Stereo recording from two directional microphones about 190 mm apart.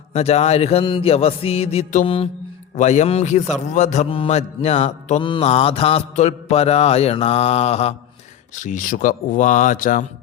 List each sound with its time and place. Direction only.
0.1 s mantra: 35° left (ahead or behind)
8.5 s speech: 40° left (ahead or behind)